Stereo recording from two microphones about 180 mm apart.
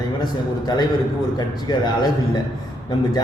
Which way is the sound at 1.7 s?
25° left (ahead or behind).